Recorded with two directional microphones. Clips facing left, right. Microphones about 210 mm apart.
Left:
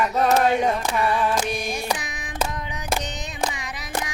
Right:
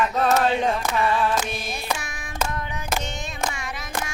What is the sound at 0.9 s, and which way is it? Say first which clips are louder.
Child singing: even; 15° left (ahead or behind).